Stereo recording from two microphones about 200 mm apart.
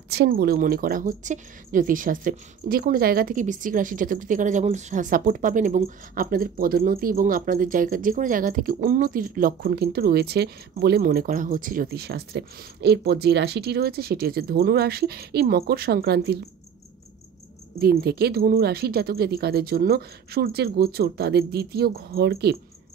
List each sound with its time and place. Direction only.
0.1 s a woman's voice: 55° right (ahead or behind)
17.7 s a woman's voice: 50° right (ahead or behind)